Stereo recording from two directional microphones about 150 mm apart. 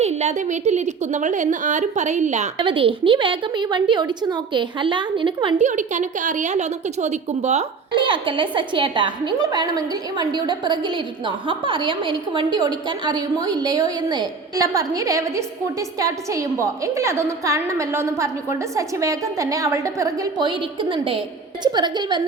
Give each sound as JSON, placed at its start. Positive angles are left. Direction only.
{"t": 0.0, "sound": "a woman's voice", "side_deg": -50}
{"t": 2.6, "sound": "a woman's voice", "side_deg": -35}
{"t": 5.5, "sound": "a woman's voice", "side_deg": -55}
{"t": 7.9, "sound": "a woman's voice", "side_deg": -35}